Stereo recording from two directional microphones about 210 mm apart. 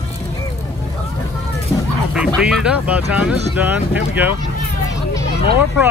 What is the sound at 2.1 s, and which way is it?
Speech, 5° right (ahead or behind).